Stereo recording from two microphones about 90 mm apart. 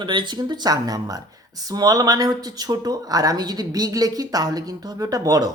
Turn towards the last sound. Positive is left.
turn(degrees=-45)  # may be behind; listen again after turning